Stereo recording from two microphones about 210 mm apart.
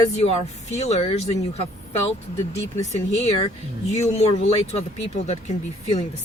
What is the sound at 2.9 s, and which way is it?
Speech, 30° left (ahead or behind).